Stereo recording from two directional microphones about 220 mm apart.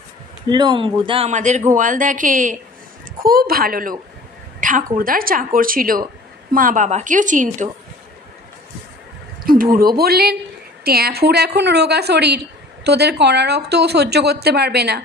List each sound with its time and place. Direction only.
0.5 s a woman's voice: 20° right (ahead or behind); by 3.9 s 40° right (ahead or behind)
4.6 s a sound: 35° right (ahead or behind)
4.9 s a woman's voice: 40° right (ahead or behind)
9.4 s a woman's voice: 40° right (ahead or behind)